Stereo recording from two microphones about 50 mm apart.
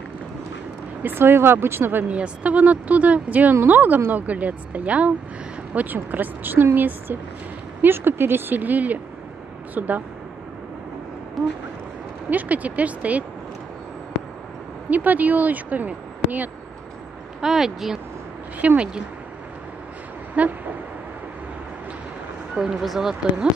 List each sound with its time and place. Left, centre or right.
1.0 s speech: right
2.0 s speech: right
6.1 s speech: right
12.3 s speech: right
14.9 s speech: right
17.4 s speech: centre
18.6 s speech: right
20.4 s speech: right
22.6 s speech: centre